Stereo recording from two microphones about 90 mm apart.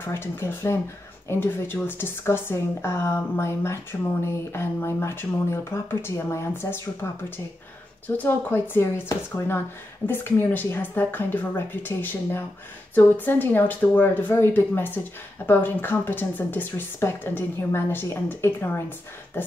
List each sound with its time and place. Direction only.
0.0 s speech: 30° left (ahead or behind)
10.0 s speech: 25° left (ahead or behind)